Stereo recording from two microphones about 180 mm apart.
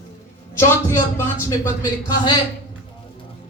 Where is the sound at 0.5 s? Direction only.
15° left (ahead or behind).